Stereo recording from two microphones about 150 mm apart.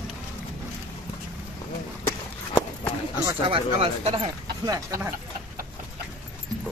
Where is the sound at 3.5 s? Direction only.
40° right (ahead or behind).